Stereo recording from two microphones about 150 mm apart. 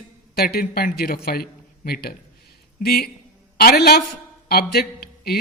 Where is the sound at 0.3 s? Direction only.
90° left.